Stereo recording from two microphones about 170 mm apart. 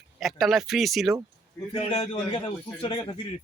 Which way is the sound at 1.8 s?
40° left (ahead or behind).